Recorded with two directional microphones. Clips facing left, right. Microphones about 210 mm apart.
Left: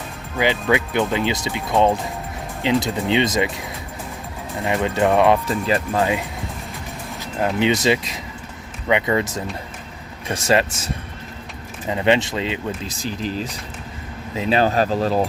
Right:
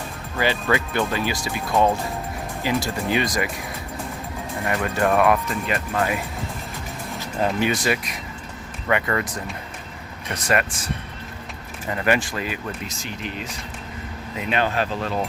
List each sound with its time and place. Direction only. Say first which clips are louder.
0.3 s speech: left 3 dB; 15° left (ahead or behind)
7.6 s speech: left 4 dB; 20° left (ahead or behind)
11.9 s speech: left 4 dB; 20° left (ahead or behind); by 15.2 s 35° left (ahead or behind)